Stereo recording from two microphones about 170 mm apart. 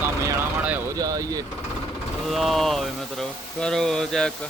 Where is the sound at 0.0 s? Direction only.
15° right (ahead or behind).